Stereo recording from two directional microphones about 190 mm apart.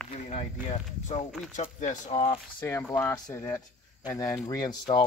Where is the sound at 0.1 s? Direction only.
35° left (ahead or behind).